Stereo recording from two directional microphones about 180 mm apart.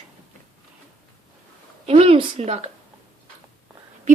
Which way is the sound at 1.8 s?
35° right (ahead or behind).